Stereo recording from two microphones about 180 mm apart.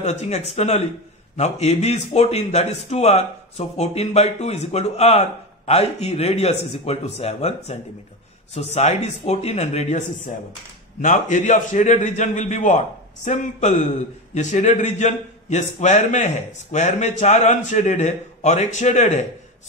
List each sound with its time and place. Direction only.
0.0 s a man's voice: 40° left (ahead or behind)